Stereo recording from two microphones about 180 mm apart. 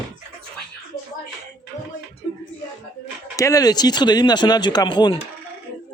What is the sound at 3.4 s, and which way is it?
Speech, 20° left (ahead or behind).